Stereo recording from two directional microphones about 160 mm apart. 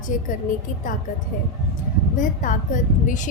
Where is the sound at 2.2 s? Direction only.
55° left (ahead or behind).